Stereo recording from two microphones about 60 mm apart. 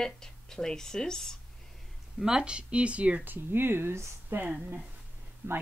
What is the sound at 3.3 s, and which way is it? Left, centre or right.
Speech, right.